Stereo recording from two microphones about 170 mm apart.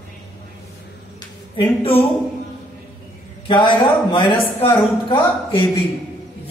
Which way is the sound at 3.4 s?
30° left (ahead or behind).